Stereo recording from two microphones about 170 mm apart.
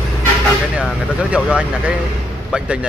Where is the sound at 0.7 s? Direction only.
5° right (ahead or behind).